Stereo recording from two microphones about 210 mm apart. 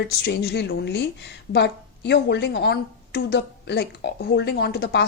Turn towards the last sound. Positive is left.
turn(degrees=50)  # may be behind; listen again after turning